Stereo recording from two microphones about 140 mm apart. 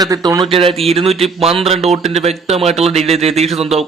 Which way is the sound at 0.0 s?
25° right (ahead or behind).